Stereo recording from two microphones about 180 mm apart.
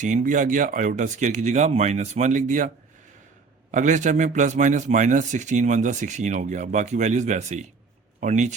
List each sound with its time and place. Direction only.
0.0 s a man's voice: 45° right (ahead or behind)